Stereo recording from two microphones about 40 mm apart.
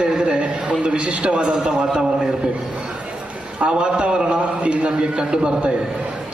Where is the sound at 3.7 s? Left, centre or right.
Right.